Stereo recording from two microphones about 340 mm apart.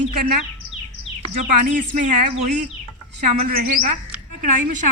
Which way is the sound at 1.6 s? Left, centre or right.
Right.